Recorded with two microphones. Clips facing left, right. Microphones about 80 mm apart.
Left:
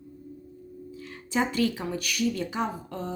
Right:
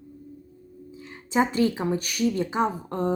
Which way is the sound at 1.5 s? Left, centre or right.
Right.